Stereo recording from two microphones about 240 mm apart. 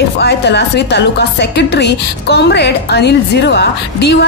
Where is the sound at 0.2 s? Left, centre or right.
Left.